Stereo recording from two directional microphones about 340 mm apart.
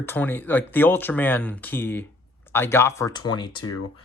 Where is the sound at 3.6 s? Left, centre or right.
Left.